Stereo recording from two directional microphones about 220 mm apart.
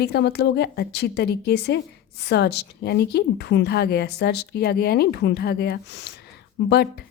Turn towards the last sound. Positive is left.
turn(degrees=45)  # may be behind; listen again after turning